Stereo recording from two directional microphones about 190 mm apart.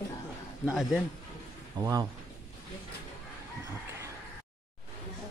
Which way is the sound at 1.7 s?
20° right (ahead or behind).